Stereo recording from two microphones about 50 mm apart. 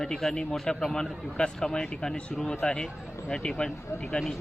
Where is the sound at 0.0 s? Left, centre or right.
Centre.